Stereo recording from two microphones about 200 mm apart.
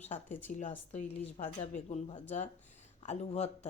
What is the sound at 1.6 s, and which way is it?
A woman's voice, 35° left (ahead or behind).